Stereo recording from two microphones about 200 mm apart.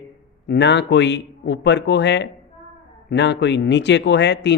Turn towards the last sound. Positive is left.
turn(degrees=60)  # may be behind; listen again after turning